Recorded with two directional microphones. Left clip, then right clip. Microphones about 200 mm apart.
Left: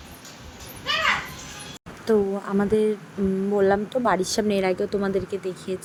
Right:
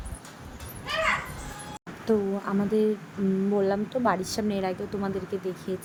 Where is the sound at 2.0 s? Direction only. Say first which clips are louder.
Left 4 dB; 15° left (ahead or behind).